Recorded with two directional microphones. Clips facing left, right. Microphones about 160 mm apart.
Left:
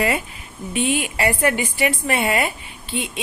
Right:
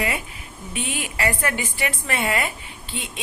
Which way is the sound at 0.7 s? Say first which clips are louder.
Left 8 dB; 20° left (ahead or behind).